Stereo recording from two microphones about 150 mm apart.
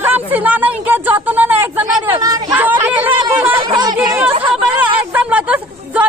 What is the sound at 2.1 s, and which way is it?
Hubbub, 25° right (ahead or behind).